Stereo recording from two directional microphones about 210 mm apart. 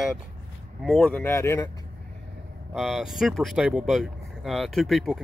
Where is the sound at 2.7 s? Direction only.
Centre (ahead or behind).